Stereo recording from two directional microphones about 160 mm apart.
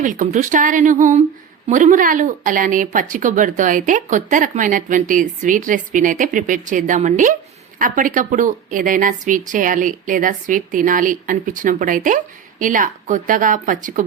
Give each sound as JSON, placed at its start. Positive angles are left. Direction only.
{"t": 0.0, "sound": "speech", "side_deg": -55}